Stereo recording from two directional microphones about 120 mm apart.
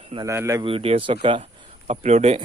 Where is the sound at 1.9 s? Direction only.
65° right (ahead or behind).